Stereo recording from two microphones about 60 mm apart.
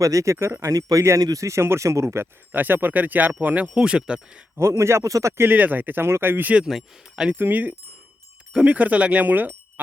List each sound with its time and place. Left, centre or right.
0.0 s speech: right
0.3 s speech: right
0.7 s speech: right
1.0 s speech: right
1.6 s speech: right
2.5 s speech: right; by 4.4 s centre
4.5 s speech: right
5.4 s speech: right
6.7 s speech: centre
7.3 s speech: right